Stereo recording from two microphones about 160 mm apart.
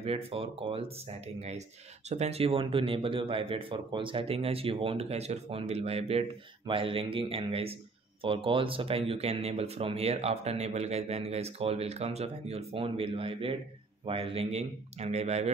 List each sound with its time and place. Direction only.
0.0 s speech: 35° right (ahead or behind)
2.0 s speech: 45° right (ahead or behind)